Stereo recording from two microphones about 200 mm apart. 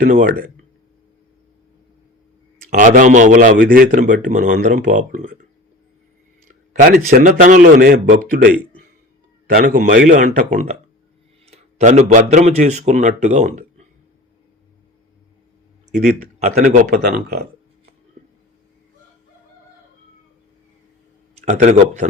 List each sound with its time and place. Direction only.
0.0 s speech: 45° right (ahead or behind)
2.6 s speech: 40° right (ahead or behind)
6.5 s a man's voice: 45° right (ahead or behind)
16.4 s speech: 35° right (ahead or behind)
16.9 s speech: 50° right (ahead or behind)
21.3 s a man's voice: 35° right (ahead or behind)